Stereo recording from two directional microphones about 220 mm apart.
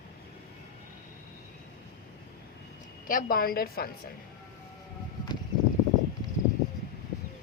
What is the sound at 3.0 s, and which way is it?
Speech, 40° left (ahead or behind).